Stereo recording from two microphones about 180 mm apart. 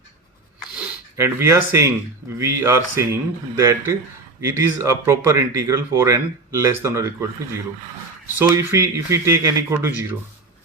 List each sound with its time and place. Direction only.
0.8 s speech: 15° right (ahead or behind)
8.4 s speech: 15° right (ahead or behind)